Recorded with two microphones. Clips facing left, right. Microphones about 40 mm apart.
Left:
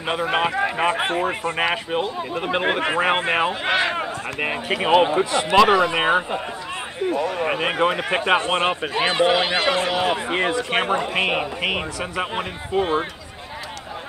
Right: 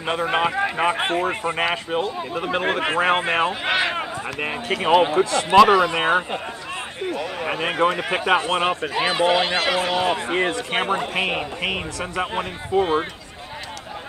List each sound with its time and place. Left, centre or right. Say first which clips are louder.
0.0 s a man's voice: even; centre
3.7 s speech: left 1 dB; centre
4.4 s a man's voice: left 2 dB; centre
5.5 s a man's voice: right 2 dB; centre
7.3 s a man's voice: left 1 dB; centre
9.0 s a man's voice: left 1 dB; centre